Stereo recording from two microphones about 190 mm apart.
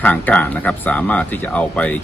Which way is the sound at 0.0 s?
10° left (ahead or behind).